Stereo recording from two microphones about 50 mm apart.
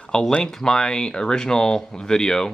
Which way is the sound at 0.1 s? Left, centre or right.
Centre.